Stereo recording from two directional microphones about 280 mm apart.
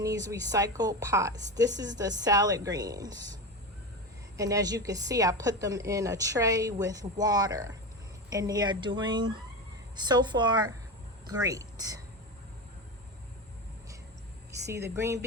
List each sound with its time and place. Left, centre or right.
0.0 s speech: centre
1.3 s a woman's voice: right
1.8 s speech: centre
4.4 s speech: centre
14.9 s speech: centre